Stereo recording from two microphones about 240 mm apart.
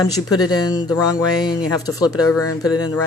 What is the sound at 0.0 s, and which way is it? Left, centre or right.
Speech, centre.